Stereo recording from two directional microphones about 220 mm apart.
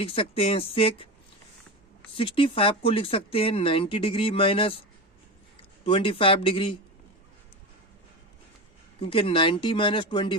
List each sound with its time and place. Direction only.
0.0 s speech: 25° left (ahead or behind)
2.1 s speech: 25° left (ahead or behind)
5.8 s speech: 25° left (ahead or behind)
9.0 s speech: 25° left (ahead or behind)